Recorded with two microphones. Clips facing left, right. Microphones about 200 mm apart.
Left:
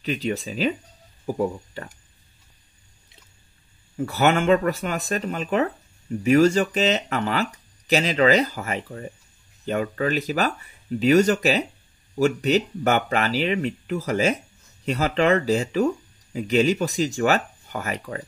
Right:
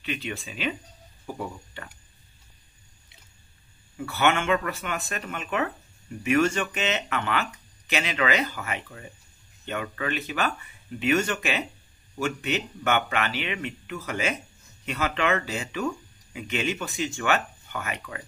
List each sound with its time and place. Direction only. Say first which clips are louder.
0.0 s speech: left 7 dB; 35° left (ahead or behind)
3.9 s speech: left 4 dB; 40° left (ahead or behind)